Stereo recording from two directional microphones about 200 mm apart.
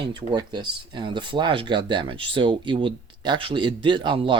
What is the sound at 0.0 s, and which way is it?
Speech, 20° right (ahead or behind).